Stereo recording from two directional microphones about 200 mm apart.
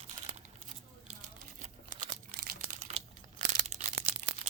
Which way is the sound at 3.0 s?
30° right (ahead or behind).